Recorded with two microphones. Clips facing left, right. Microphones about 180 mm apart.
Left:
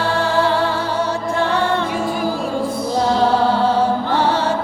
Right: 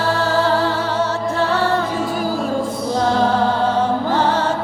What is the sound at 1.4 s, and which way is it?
Music, 40° right (ahead or behind).